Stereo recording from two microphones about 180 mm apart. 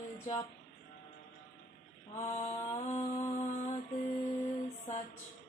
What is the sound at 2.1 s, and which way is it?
Speech, 35° left (ahead or behind).